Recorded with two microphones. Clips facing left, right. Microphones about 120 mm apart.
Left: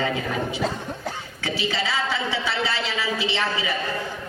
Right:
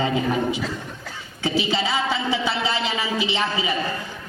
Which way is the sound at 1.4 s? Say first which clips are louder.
Right 4 dB; 20° right (ahead or behind).